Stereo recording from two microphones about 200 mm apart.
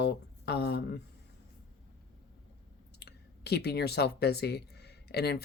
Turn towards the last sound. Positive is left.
turn(degrees=55)  # may be behind; listen again after turning